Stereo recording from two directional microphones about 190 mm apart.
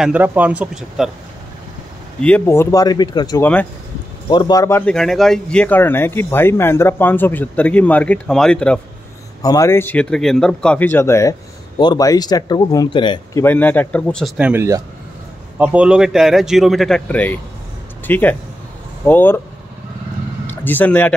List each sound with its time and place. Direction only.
0.0 s speech: 10° right (ahead or behind)
2.2 s speech: 10° left (ahead or behind)
4.9 s speech: centre (ahead or behind)
9.4 s a man's voice: 15° left (ahead or behind)
20.6 s speech: 10° left (ahead or behind)